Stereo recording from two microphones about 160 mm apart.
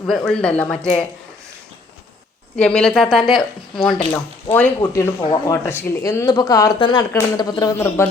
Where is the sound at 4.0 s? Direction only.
15° left (ahead or behind).